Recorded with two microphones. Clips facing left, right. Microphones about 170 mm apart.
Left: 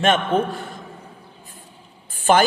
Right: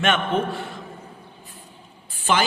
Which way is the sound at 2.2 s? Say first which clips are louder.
Left 6 dB; 50° left (ahead or behind).